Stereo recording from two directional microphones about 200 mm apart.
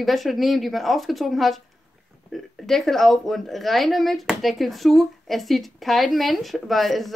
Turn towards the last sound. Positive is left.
turn(degrees=0)  # may be behind; listen again after turning